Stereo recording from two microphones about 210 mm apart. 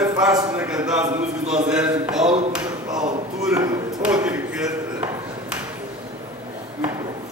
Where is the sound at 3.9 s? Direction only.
5° right (ahead or behind).